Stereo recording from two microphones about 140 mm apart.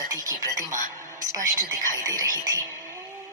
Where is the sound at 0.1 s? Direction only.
25° right (ahead or behind).